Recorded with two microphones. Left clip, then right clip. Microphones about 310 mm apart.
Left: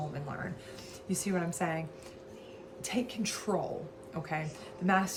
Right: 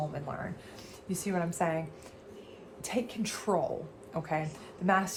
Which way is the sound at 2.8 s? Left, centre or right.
Centre.